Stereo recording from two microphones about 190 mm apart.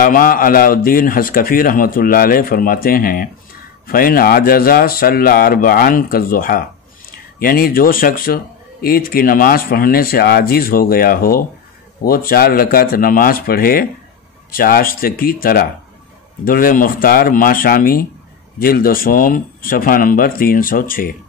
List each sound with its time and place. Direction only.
0.0 s speech: 50° left (ahead or behind)